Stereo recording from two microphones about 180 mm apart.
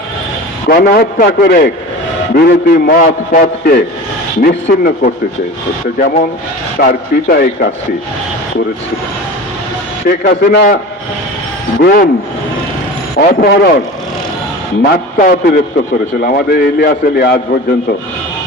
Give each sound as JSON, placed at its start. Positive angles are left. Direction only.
{"t": 0.7, "sound": "a man's voice", "side_deg": 60}
{"t": 10.1, "sound": "a man's voice", "side_deg": 65}
{"t": 11.8, "sound": "a man's voice", "side_deg": 55}
{"t": 13.1, "sound": "a man's voice", "side_deg": 60}
{"t": 14.8, "sound": "a man's voice", "side_deg": 60}